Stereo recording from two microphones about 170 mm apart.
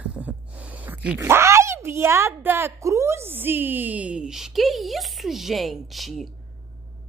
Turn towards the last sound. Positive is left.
turn(degrees=0)  # may be behind; listen again after turning